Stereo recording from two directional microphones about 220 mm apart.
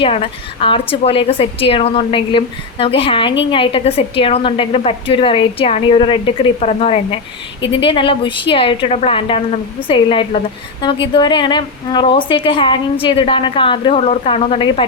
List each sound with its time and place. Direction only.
0.0 s a woman's voice: 25° left (ahead or behind)